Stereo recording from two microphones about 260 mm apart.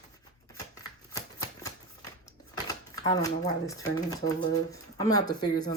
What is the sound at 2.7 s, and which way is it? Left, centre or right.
Typewriter, centre.